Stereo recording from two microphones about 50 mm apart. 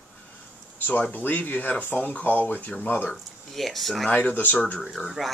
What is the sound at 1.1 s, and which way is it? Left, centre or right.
Speech, left.